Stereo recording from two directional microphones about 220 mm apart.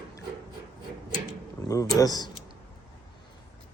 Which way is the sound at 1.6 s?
15° left (ahead or behind).